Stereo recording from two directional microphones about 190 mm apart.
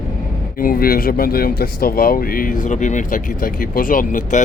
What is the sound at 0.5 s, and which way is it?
Speech, 50° left (ahead or behind).